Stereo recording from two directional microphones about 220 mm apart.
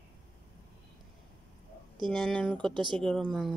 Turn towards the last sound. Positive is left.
turn(degrees=0)  # may be behind; listen again after turning